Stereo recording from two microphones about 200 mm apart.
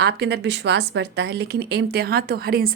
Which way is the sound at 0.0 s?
55° right (ahead or behind).